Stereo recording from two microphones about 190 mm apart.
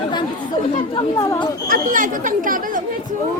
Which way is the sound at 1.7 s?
45° right (ahead or behind).